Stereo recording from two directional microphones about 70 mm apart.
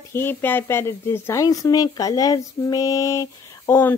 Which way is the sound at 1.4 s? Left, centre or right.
Left.